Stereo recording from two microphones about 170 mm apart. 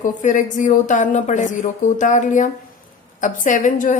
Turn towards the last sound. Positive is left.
turn(degrees=50)  # may be behind; listen again after turning